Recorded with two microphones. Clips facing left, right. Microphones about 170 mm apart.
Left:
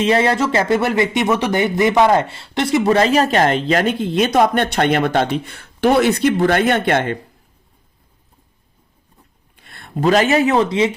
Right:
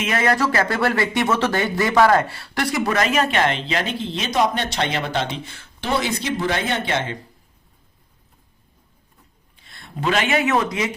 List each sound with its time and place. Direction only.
0.0 s speech: 30° left (ahead or behind); by 7.2 s 55° left (ahead or behind)
9.6 s speech: 55° left (ahead or behind); by 10.9 s 30° left (ahead or behind)